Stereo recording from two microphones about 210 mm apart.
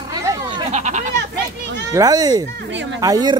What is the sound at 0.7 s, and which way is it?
Goat, 35° right (ahead or behind).